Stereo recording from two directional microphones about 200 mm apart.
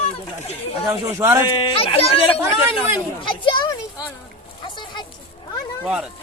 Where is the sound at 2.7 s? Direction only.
25° left (ahead or behind).